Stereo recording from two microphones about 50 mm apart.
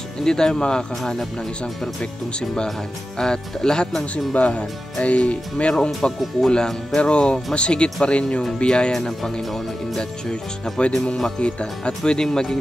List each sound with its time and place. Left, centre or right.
0.2 s speech: centre
3.2 s speech: centre
4.0 s speech: left
8.9 s speech: centre
10.8 s speech: left